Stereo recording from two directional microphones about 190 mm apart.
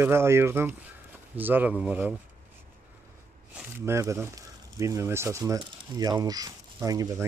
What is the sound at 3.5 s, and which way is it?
Speech, 15° right (ahead or behind).